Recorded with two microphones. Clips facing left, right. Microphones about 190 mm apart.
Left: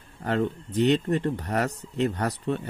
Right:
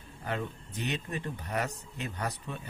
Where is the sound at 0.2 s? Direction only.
65° left (ahead or behind).